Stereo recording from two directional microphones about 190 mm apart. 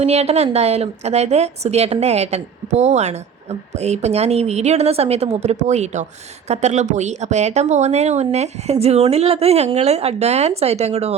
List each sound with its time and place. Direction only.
0.0 s a woman's voice: 35° right (ahead or behind)